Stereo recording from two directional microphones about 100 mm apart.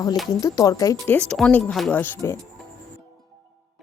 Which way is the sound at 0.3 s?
35° left (ahead or behind).